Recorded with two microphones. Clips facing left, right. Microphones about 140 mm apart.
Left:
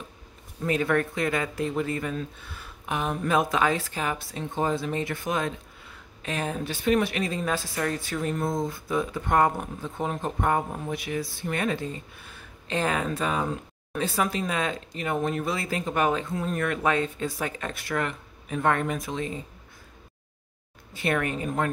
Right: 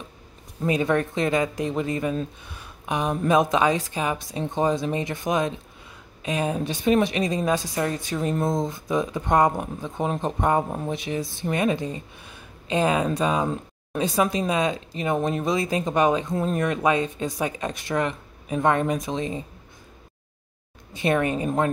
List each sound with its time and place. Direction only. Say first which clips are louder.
0.7 s speech: right 2 dB; 20° right (ahead or behind)
20.9 s speech: right 4 dB; 20° right (ahead or behind)